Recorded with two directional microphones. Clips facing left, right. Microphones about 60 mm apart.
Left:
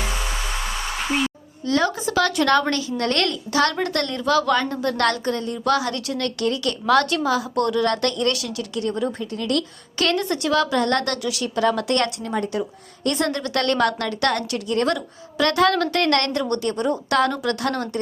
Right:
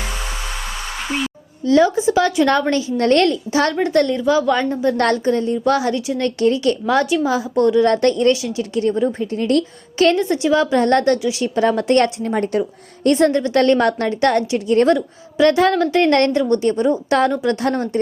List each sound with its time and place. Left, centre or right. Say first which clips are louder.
1.6 s a woman's voice: right 8 dB; right
6.8 s a woman's voice: left 2 dB; centre; by 12.6 s right
13.1 s a woman's voice: right 8 dB; right